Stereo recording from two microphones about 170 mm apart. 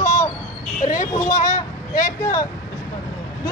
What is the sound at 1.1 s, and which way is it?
Speech, 20° left (ahead or behind).